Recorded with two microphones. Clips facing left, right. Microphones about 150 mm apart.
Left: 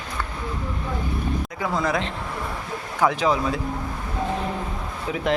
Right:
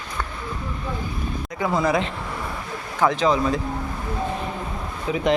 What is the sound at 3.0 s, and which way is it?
Speech, 10° left (ahead or behind).